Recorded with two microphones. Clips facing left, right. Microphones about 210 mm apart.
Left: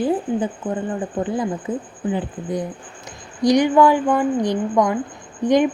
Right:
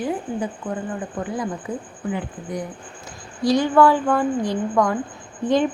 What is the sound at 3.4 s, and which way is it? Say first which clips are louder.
A woman's voice: left 2 dB; 15° left (ahead or behind).